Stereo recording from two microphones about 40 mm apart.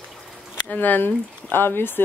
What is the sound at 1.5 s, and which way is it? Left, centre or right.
Speech, left.